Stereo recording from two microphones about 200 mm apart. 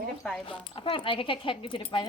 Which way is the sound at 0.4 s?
25° left (ahead or behind).